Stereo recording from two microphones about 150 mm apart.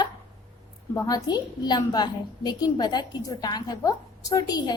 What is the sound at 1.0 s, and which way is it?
A woman's voice, 25° left (ahead or behind).